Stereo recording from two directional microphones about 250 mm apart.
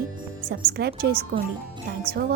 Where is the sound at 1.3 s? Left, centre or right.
Right.